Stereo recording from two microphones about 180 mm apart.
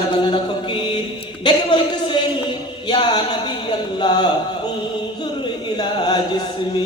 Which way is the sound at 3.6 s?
25° left (ahead or behind).